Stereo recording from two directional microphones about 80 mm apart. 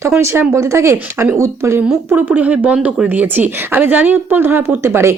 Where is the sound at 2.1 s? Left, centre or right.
Right.